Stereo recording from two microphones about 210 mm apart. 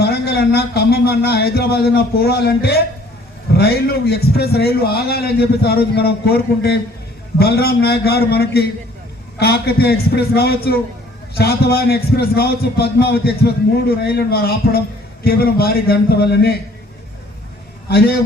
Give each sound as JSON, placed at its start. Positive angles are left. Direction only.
{"t": 0.0, "sound": "a man's voice", "side_deg": 50}
{"t": 17.8, "sound": "a man's voice", "side_deg": 50}